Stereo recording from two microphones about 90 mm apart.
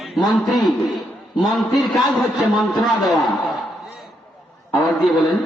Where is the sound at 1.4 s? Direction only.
Centre (ahead or behind).